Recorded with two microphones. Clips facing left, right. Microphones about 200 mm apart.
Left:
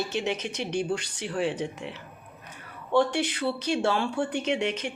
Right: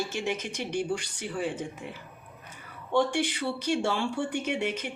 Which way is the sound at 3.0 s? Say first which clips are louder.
Even; 10° right (ahead or behind).